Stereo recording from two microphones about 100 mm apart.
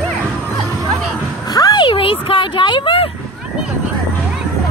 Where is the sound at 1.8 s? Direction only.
60° left (ahead or behind).